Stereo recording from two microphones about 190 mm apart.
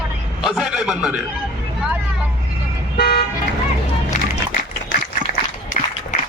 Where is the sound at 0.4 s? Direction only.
Centre (ahead or behind).